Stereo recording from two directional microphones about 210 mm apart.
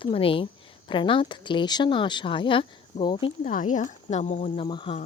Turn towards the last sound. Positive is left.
turn(degrees=25)  # may be behind; listen again after turning